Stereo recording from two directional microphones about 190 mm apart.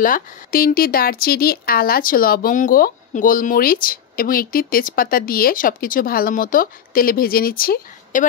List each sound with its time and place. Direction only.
0.0 s speech: 50° left (ahead or behind)